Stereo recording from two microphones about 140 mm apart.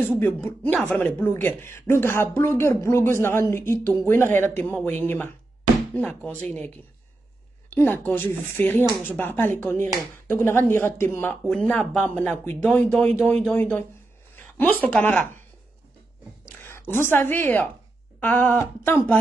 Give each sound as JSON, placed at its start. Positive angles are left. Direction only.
{"t": 0.2, "sound": "speech", "side_deg": 15}
{"t": 7.7, "sound": "speech", "side_deg": 15}
{"t": 11.4, "sound": "speech", "side_deg": 5}
{"t": 14.3, "sound": "a sound", "side_deg": 10}
{"t": 14.9, "sound": "speech", "side_deg": 10}
{"t": 16.6, "sound": "a woman's voice", "side_deg": 15}